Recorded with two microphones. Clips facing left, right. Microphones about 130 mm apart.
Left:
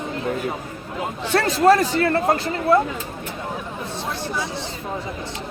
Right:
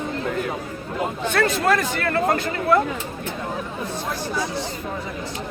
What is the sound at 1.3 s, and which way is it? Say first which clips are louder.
Speech: left 5 dB; 30° left (ahead or behind).